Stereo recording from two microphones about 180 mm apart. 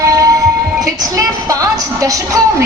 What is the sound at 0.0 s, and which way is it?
Music, 20° right (ahead or behind).